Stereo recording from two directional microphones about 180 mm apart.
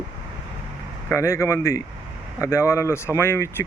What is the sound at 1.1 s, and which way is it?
Speech, 15° left (ahead or behind).